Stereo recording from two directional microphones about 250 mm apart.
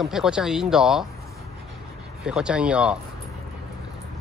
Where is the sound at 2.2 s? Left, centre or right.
Centre.